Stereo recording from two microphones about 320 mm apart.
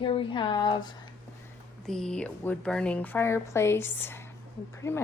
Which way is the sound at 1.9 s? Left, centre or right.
Centre.